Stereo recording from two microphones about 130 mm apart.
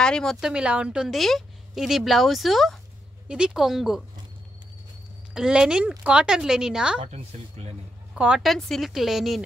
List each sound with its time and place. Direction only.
0.0 s a woman's voice: 5° left (ahead or behind)
5.3 s a woman's voice: 5° right (ahead or behind)
7.1 s speech: 60° right (ahead or behind)
8.1 s a woman's voice: 10° right (ahead or behind)